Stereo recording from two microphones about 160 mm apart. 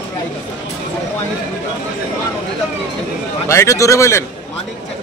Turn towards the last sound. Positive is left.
turn(degrees=20)  # may be behind; listen again after turning